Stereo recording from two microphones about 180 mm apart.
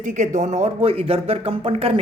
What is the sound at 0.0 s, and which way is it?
Speech, 40° right (ahead or behind).